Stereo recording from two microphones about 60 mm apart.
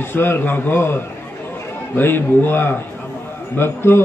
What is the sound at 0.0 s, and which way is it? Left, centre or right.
A man's voice, left.